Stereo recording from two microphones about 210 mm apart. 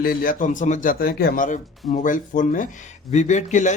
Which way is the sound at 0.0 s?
45° left (ahead or behind).